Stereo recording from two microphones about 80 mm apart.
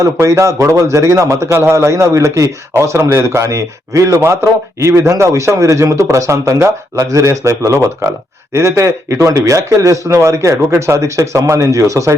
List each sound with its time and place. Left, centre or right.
0.0 s a man's voice: right